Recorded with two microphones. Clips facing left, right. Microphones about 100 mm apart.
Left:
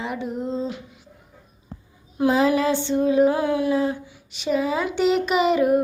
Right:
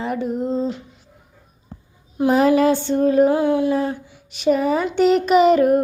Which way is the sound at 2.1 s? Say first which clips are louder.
Right 3 dB; 25° right (ahead or behind).